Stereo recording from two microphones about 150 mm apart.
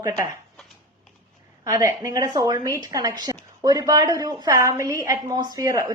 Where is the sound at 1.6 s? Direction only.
20° right (ahead or behind).